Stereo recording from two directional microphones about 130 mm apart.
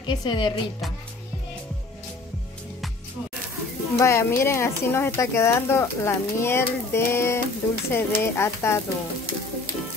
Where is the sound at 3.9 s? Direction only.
20° left (ahead or behind).